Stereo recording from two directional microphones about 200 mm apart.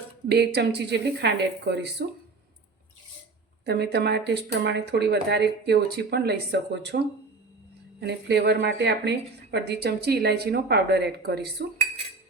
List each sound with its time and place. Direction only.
0.3 s speech: 55° right (ahead or behind)
3.7 s speech: 55° right (ahead or behind)
8.0 s speech: 55° right (ahead or behind)